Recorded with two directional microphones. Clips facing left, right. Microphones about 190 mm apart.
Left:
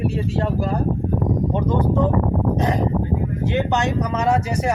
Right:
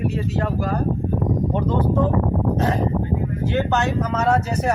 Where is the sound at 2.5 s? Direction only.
15° left (ahead or behind).